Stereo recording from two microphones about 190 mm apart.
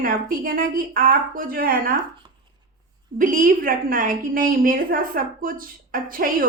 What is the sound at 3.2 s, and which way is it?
A woman's voice, 45° right (ahead or behind).